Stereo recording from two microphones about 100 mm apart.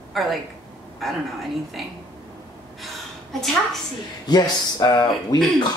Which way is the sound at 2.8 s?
Centre (ahead or behind).